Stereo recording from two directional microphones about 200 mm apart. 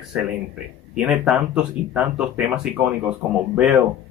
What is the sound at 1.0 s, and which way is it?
Speech, centre (ahead or behind).